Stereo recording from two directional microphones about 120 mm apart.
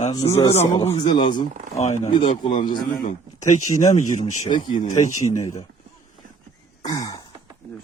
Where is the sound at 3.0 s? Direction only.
85° left.